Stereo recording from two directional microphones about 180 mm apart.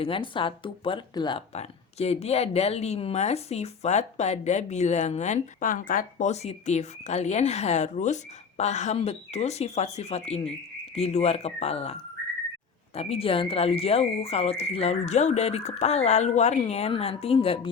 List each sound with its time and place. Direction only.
0.0 s speech: 30° left (ahead or behind)
1.5 s a woman's voice: 35° left (ahead or behind)